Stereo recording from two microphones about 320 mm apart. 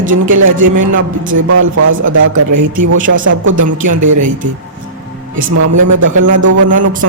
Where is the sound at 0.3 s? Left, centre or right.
Right.